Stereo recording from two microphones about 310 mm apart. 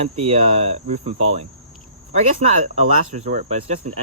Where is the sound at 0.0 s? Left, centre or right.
Centre.